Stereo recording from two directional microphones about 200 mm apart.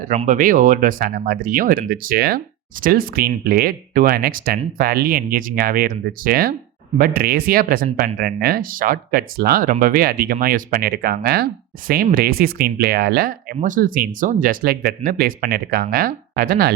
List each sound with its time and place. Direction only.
0.0 s speech: 35° right (ahead or behind)